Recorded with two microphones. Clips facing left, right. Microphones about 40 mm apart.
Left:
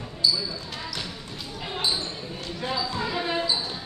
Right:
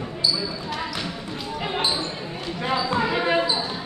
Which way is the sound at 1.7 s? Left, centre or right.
Right.